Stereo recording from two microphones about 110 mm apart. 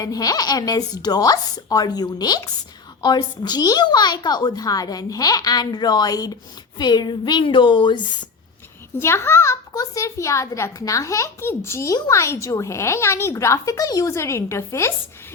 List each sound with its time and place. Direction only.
0.0 s a woman's voice: 35° left (ahead or behind)
9.0 s a woman's voice: 25° left (ahead or behind)